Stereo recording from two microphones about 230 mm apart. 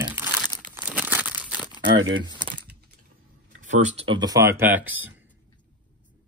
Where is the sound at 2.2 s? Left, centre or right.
Centre.